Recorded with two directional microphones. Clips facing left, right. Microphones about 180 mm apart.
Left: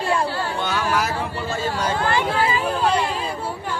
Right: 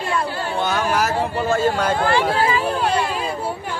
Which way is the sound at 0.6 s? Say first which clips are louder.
Right 4 dB; 45° right (ahead or behind).